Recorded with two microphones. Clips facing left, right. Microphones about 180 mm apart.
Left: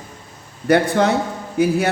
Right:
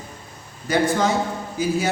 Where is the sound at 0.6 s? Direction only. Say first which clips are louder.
Left 4 dB; 65° left (ahead or behind).